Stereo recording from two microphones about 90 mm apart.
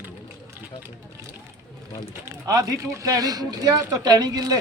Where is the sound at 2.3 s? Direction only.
35° right (ahead or behind).